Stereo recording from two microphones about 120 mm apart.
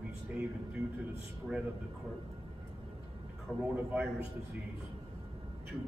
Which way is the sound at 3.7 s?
15° right (ahead or behind).